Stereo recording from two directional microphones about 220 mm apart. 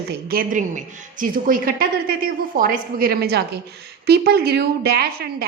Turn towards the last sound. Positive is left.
turn(degrees=-45)  # may be behind; listen again after turning